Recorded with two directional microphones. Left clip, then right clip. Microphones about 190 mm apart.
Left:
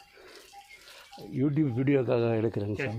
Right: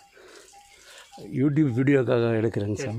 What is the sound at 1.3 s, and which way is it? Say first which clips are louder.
Speech: right 5 dB; 35° right (ahead or behind).